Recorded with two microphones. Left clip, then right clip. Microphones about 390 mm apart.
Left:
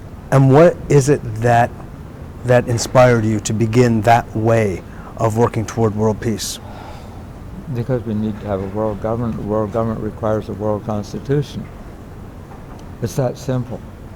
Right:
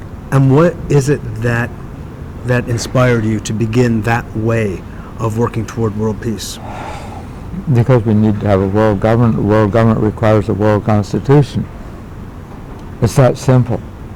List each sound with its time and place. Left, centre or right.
0.3 s speech: centre
6.7 s whispering: right
7.7 s a man's voice: right
13.0 s a man's voice: right